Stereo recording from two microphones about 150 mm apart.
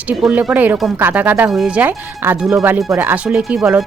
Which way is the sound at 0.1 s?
10° right (ahead or behind).